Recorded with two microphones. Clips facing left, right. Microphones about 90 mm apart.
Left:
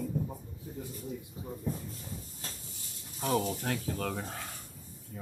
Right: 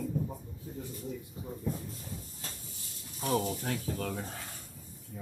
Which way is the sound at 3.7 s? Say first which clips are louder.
Left 1 dB; 30° right (ahead or behind).